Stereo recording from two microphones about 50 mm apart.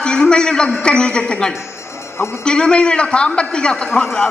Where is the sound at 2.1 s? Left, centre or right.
Left.